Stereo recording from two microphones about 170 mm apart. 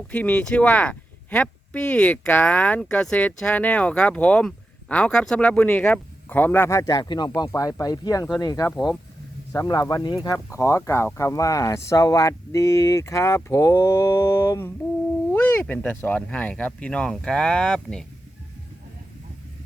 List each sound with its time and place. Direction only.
0.1 s speech: 10° left (ahead or behind)